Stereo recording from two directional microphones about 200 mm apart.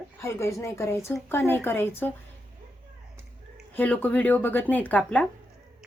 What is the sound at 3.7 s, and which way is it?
A man's voice, 10° left (ahead or behind).